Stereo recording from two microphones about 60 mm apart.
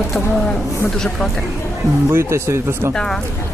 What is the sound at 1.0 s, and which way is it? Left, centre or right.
Speech, centre.